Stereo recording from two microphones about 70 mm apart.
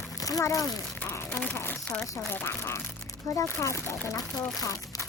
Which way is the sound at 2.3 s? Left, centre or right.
Left.